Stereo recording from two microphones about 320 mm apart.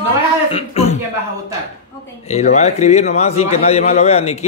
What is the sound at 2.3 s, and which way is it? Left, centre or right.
A man's voice, left.